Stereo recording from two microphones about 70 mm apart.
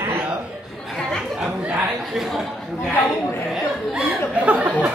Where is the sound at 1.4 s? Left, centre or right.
Centre.